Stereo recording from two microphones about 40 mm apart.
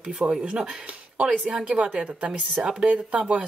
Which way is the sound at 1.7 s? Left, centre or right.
Right.